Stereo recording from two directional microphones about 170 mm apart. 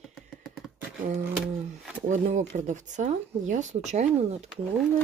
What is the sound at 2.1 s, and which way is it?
Speech, 45° right (ahead or behind).